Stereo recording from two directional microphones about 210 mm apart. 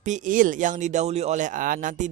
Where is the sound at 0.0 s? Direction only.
35° right (ahead or behind).